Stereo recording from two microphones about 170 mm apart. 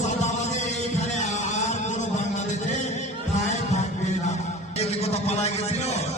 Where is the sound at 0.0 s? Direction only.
45° left (ahead or behind).